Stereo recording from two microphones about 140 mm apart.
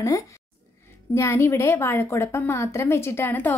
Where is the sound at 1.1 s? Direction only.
20° left (ahead or behind).